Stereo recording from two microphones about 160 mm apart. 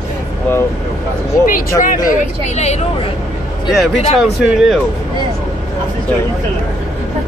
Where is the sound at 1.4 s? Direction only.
60° left (ahead or behind).